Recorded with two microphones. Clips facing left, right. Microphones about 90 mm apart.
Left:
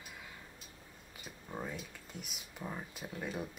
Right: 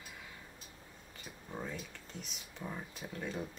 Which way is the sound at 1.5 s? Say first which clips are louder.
Even; 10° left (ahead or behind).